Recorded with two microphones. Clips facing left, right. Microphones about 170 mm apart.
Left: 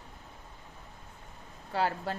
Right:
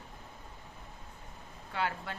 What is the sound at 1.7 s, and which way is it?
Speech, 35° left (ahead or behind).